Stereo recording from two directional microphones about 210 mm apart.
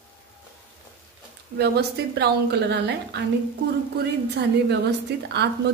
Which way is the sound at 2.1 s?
55° right (ahead or behind).